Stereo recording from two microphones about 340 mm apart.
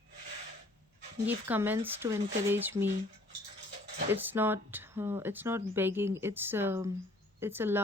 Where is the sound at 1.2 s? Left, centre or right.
Centre.